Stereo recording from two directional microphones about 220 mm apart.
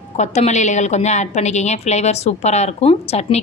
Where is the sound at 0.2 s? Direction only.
30° left (ahead or behind).